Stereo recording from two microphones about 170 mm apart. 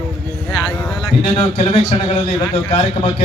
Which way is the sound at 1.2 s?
40° left (ahead or behind).